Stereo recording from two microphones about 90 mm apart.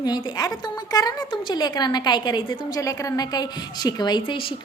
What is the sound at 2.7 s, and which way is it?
A woman's voice, 35° left (ahead or behind).